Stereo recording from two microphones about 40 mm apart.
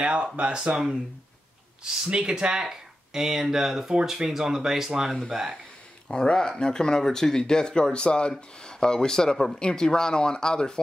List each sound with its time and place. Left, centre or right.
0.0 s speech: right
2.0 s speech: right
6.0 s speech: centre